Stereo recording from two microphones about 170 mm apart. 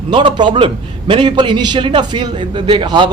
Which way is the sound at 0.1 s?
30° right (ahead or behind).